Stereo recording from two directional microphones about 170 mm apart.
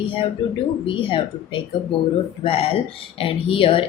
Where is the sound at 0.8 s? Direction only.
30° left (ahead or behind).